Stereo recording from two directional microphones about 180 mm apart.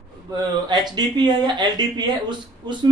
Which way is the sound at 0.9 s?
25° right (ahead or behind).